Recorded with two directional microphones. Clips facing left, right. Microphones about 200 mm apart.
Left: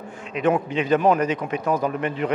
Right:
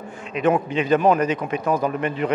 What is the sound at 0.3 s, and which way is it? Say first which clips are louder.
A man's voice: right 1 dB; 10° right (ahead or behind).